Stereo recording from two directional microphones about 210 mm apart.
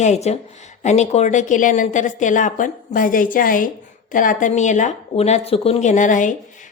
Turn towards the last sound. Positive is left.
turn(degrees=35)  # may be behind; listen again after turning